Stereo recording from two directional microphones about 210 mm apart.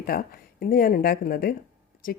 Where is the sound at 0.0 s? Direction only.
45° left (ahead or behind).